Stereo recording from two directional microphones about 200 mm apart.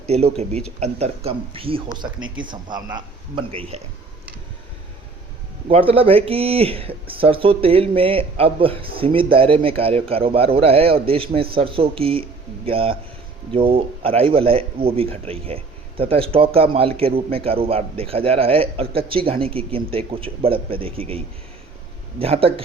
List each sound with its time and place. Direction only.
0.1 s speech: 30° right (ahead or behind)
2.1 s speech: 80° right
2.4 s speech: 20° right (ahead or behind)
5.6 s speech: 30° right (ahead or behind)
22.2 s speech: 30° right (ahead or behind)